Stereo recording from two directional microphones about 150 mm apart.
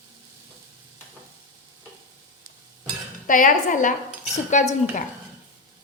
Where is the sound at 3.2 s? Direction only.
65° left (ahead or behind).